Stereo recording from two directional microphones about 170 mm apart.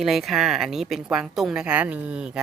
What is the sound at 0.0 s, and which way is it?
A woman's voice, centre (ahead or behind).